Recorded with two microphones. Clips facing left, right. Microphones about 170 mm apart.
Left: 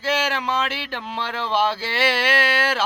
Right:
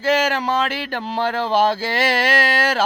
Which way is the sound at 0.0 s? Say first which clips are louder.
Right 5 dB; 45° right (ahead or behind).